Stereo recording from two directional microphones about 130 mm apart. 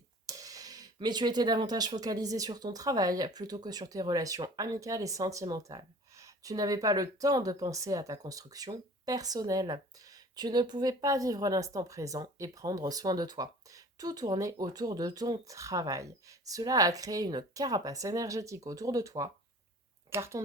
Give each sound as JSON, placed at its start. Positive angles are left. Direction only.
{"t": 0.3, "sound": "a woman's voice", "side_deg": -25}